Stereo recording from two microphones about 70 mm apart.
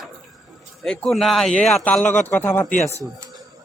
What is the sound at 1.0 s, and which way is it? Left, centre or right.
Speech, centre.